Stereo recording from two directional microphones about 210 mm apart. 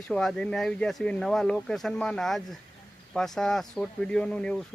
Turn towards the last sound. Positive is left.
turn(degrees=5)  # may be behind; listen again after turning